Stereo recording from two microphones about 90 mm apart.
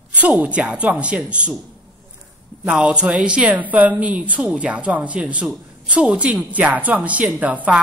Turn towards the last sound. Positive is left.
turn(degrees=-15)  # may be behind; listen again after turning